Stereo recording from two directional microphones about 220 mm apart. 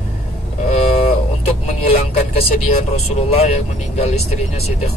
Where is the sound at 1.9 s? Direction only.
25° left (ahead or behind).